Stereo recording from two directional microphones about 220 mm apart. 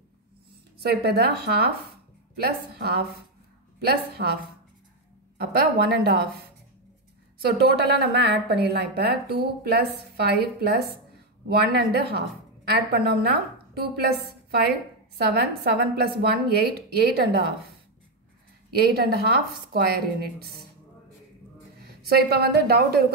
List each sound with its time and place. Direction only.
0.7 s speech: 45° right (ahead or behind)
5.4 s speech: 45° right (ahead or behind)
7.5 s a woman's voice: 45° right (ahead or behind)
18.8 s speech: 45° right (ahead or behind)
22.0 s speech: 45° right (ahead or behind)